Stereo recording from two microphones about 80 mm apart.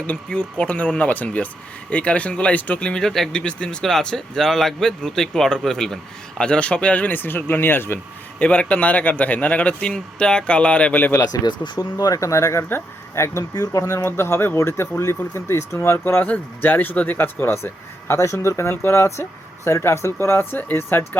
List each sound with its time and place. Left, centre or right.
0.1 s speech: centre
8.4 s speech: centre
11.4 s speech: left
11.8 s speech: left
13.5 s speech: left
18.1 s speech: left